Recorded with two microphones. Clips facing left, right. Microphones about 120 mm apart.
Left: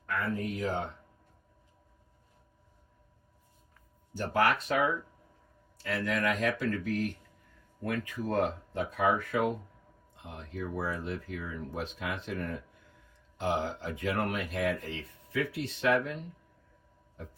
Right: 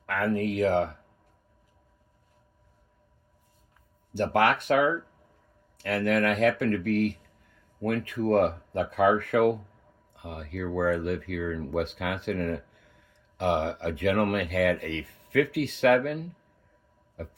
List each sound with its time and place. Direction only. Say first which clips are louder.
0.0 s speech: right 6 dB; 85° right
4.1 s speech: right 4 dB; 70° right (ahead or behind)